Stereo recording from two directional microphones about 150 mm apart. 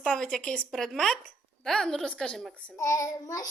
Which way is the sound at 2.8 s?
20° left (ahead or behind).